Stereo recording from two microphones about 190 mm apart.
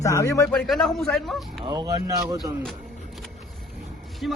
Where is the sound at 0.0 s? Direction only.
15° left (ahead or behind).